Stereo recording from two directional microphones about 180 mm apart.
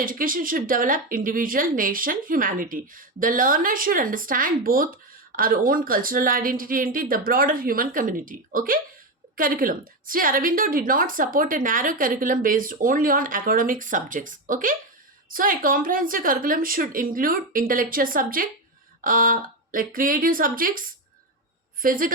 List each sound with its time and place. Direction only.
0.0 s a woman's voice: 50° right (ahead or behind)